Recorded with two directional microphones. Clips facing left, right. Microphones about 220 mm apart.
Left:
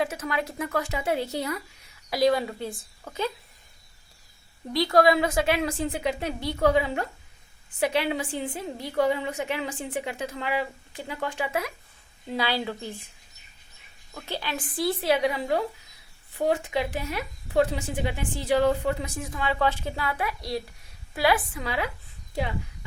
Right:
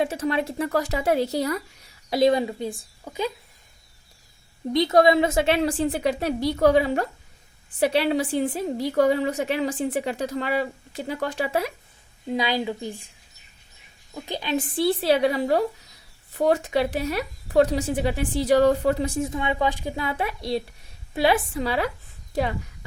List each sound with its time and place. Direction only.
0.0 s speech: 25° right (ahead or behind)
2.0 s a woman's voice: 25° right (ahead or behind)
4.7 s speech: 20° right (ahead or behind)
12.3 s a woman's voice: 15° right (ahead or behind)
14.1 s speech: 15° right (ahead or behind); by 21.8 s 30° right (ahead or behind)